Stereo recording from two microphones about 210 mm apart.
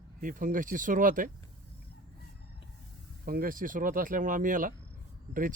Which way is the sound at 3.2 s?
45° right (ahead or behind).